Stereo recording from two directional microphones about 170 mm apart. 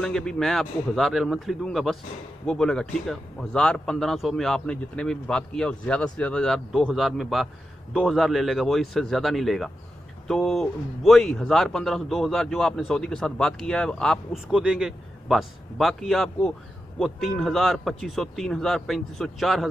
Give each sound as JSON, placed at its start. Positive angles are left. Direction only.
{"t": 0.0, "sound": "a man's voice", "side_deg": 5}